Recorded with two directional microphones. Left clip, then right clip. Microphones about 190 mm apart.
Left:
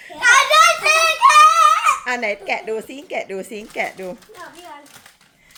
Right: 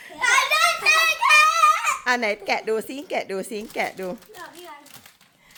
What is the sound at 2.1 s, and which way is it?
A woman's voice, 35° right (ahead or behind).